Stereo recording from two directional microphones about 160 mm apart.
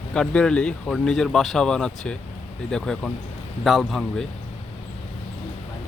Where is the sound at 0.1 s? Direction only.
5° left (ahead or behind).